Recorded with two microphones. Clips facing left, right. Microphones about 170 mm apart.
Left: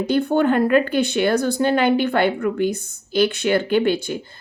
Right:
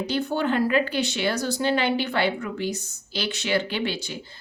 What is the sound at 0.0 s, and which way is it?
A woman's voice, 55° left (ahead or behind).